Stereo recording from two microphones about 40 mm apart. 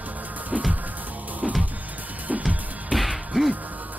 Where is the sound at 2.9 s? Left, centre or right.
Centre.